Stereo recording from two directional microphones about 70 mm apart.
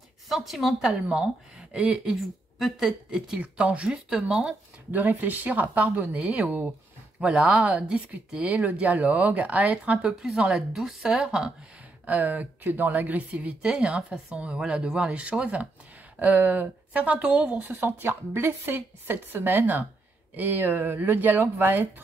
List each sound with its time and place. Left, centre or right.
0.3 s speech: centre
2.1 s a woman's voice: centre
3.2 s speech: centre
4.9 s speech: right
12.1 s speech: right